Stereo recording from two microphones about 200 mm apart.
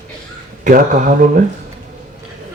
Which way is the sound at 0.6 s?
40° right (ahead or behind).